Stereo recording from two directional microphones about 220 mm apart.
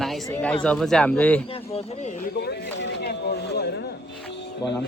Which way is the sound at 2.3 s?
50° left (ahead or behind).